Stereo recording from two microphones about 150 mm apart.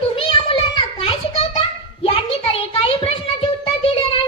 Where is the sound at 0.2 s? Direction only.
35° left (ahead or behind).